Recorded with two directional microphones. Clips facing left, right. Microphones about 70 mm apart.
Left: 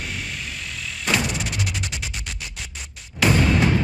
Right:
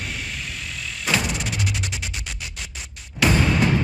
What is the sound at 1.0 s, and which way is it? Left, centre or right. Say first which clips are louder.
Music: even; centre.